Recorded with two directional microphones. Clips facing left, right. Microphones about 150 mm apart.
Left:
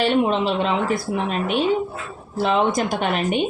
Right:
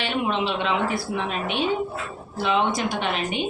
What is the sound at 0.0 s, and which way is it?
A woman's voice, 40° left (ahead or behind).